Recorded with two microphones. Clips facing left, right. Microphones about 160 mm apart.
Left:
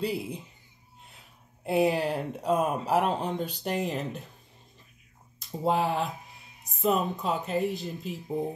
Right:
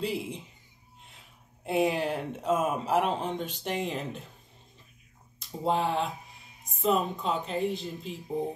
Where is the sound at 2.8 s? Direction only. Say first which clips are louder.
Left 1 dB; 35° left (ahead or behind).